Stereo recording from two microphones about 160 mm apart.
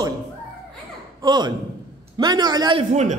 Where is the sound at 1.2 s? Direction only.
25° right (ahead or behind).